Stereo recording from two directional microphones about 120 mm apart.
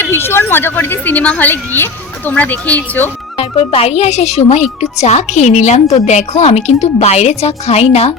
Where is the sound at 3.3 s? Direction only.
55° left (ahead or behind).